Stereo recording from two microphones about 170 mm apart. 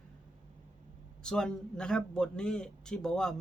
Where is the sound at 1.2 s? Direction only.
5° left (ahead or behind).